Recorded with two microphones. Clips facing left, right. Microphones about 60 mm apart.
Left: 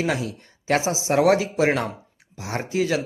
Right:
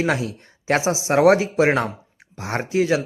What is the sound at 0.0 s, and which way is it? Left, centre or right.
Speech, right.